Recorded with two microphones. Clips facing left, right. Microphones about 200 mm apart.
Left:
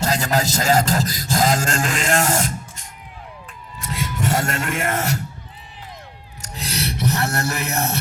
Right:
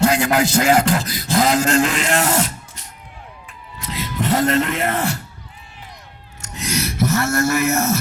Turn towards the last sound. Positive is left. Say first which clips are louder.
# right 6 dB
turn(degrees=35)  # may be behind; listen again after turning